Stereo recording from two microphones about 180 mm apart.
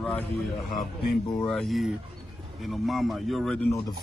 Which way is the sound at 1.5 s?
Centre (ahead or behind).